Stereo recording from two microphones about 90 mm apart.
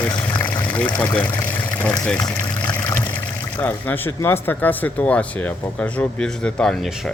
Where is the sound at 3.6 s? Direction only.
20° left (ahead or behind).